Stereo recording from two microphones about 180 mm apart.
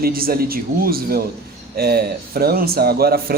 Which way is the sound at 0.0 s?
55° right (ahead or behind).